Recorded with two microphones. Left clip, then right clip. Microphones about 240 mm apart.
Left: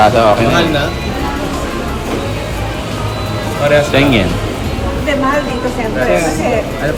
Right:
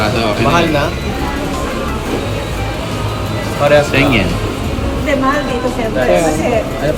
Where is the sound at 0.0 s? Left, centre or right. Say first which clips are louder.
Left 6 dB; centre.